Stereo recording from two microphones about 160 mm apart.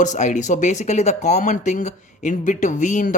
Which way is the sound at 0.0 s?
50° left (ahead or behind).